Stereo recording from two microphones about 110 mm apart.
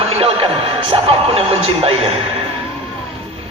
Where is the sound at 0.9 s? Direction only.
60° right (ahead or behind).